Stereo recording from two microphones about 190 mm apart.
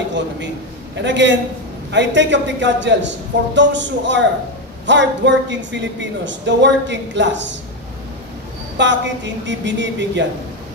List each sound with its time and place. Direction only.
1.0 s a woman's voice: 70° right (ahead or behind)
8.7 s a woman's voice: 70° right (ahead or behind)